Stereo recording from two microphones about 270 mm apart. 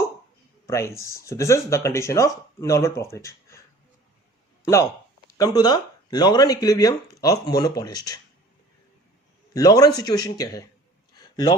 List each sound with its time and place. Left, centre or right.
0.7 s speech: centre
5.4 s speech: centre
9.5 s speech: centre
11.1 s a sound: centre